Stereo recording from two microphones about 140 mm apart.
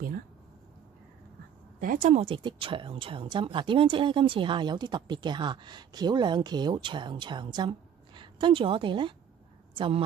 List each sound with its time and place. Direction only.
1.8 s speech: 70° right (ahead or behind)
2.2 s speech: 40° right (ahead or behind)